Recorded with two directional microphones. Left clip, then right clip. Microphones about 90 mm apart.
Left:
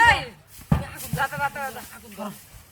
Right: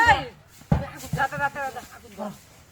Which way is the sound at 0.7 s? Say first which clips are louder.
Even; 20° left (ahead or behind).